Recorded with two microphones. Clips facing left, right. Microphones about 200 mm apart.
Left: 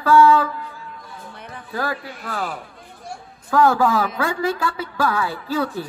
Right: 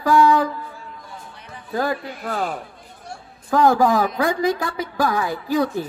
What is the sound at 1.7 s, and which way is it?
Speech, 20° right (ahead or behind).